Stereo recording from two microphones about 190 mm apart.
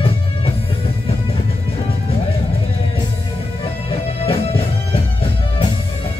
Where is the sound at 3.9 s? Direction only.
30° left (ahead or behind).